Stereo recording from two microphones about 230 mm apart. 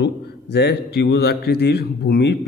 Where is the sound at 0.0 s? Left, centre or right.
Left.